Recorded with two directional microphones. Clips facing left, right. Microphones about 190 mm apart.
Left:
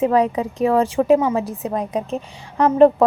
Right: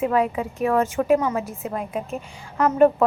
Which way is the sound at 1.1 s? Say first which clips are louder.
Left 4 dB; 20° left (ahead or behind).